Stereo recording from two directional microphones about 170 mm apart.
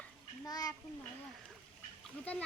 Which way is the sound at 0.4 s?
20° left (ahead or behind).